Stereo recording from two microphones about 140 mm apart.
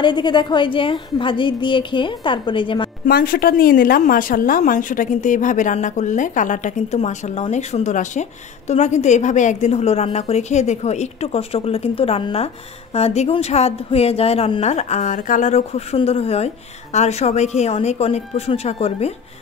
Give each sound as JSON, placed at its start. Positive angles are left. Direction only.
{"t": 0.0, "sound": "a woman's voice", "side_deg": 30}
{"t": 3.1, "sound": "a woman's voice", "side_deg": 90}